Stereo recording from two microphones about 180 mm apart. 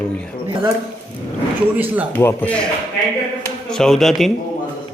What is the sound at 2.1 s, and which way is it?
Speech, 15° left (ahead or behind).